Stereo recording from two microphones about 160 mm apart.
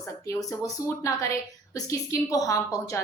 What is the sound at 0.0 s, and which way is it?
A woman's voice, 20° left (ahead or behind).